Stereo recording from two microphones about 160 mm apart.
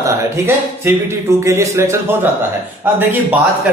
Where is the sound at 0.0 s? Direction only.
15° right (ahead or behind).